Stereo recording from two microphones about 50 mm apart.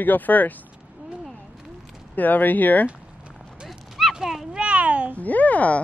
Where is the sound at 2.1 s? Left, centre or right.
Left.